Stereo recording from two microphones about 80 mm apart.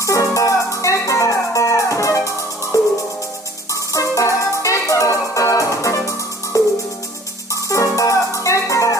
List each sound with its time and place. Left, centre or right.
0.0 s music: left
3.7 s music: left